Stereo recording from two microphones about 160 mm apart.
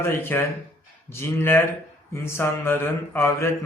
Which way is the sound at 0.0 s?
15° left (ahead or behind).